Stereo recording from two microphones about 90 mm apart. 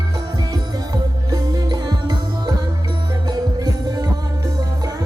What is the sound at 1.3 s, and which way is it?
Music, 45° right (ahead or behind).